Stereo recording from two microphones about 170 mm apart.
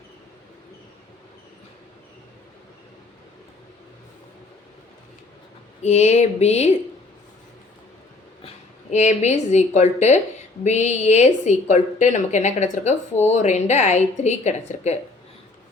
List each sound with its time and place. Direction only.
5.8 s a woman's voice: 40° left (ahead or behind)
8.9 s a woman's voice: 45° left (ahead or behind)